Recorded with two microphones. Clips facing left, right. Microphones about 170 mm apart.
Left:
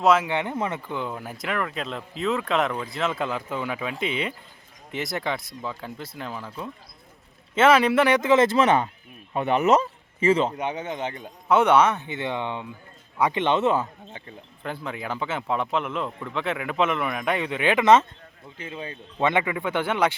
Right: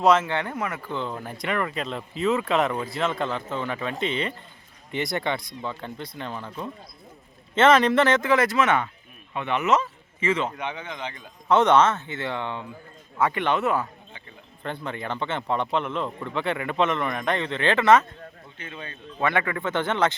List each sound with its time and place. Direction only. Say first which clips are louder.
0.0 s speech: even; 5° left (ahead or behind)
0.3 s speech: left 1 dB; 15° left (ahead or behind)
0.5 s a man's voice: left 2 dB; 30° left (ahead or behind)
0.8 s speech: even; 15° left (ahead or behind); by 11.1 s 45° left (ahead or behind)
11.4 s speech: even; 10° left (ahead or behind)
14.6 s speech: even; 5° left (ahead or behind)
18.5 s a man's voice: left 5 dB; 30° left (ahead or behind)
18.9 s speech: left 2 dB; 20° left (ahead or behind)